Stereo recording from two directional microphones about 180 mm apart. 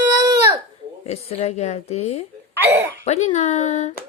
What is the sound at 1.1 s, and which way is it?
A woman's voice, 35° left (ahead or behind).